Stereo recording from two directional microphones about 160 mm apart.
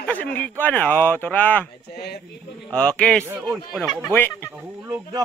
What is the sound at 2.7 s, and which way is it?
A man's voice, 5° left (ahead or behind).